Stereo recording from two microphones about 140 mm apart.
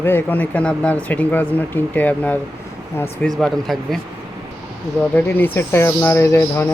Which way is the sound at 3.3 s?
Centre (ahead or behind).